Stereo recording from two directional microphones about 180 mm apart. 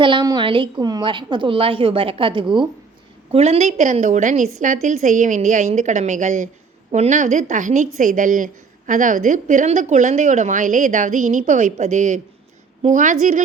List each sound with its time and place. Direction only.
0.0 s a woman's voice: 25° right (ahead or behind); by 13.4 s 45° right (ahead or behind)